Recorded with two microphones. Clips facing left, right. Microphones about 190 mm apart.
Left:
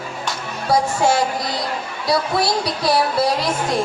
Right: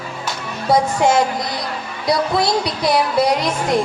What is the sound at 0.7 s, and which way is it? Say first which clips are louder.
Speech: right 2 dB; 20° right (ahead or behind).